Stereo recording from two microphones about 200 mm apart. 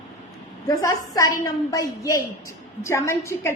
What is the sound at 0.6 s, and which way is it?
A woman's voice, 15° left (ahead or behind).